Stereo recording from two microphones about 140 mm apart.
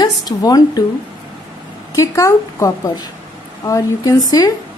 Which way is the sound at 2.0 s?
20° left (ahead or behind).